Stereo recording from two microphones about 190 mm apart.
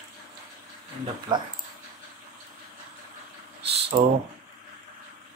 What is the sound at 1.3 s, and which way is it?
Speech, 25° right (ahead or behind).